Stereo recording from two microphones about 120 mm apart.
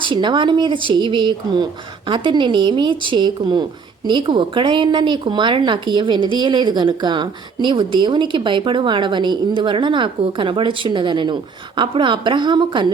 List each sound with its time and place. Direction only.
0.0 s a woman's voice: 40° right (ahead or behind)